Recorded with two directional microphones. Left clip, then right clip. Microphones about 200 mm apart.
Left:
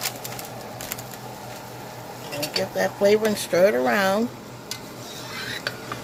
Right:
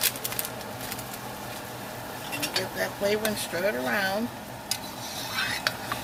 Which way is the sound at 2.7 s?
55° left (ahead or behind).